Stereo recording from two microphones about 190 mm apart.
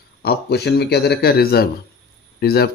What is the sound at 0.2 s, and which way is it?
A man's voice, 55° left (ahead or behind).